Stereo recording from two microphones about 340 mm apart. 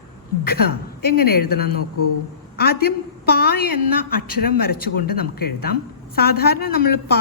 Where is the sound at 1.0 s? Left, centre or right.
Left.